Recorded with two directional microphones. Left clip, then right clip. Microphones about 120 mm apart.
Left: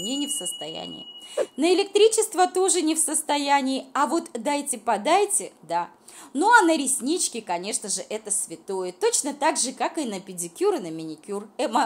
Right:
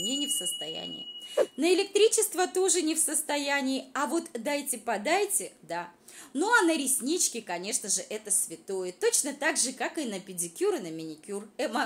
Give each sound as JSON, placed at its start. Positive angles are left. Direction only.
{"t": 0.0, "sound": "a woman's voice", "side_deg": 35}
{"t": 0.8, "sound": "speech", "side_deg": 0}
{"t": 1.6, "sound": "a woman's voice", "side_deg": 35}